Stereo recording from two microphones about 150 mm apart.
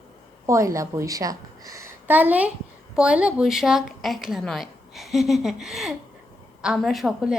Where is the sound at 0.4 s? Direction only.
20° right (ahead or behind).